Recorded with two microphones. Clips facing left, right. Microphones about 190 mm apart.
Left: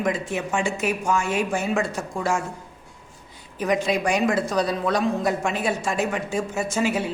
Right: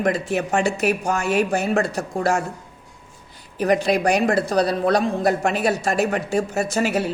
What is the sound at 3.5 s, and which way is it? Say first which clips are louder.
A woman's voice: right 4 dB; 65° right (ahead or behind).